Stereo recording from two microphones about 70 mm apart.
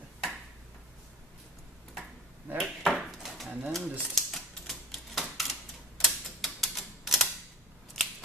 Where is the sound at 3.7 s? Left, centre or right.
Centre.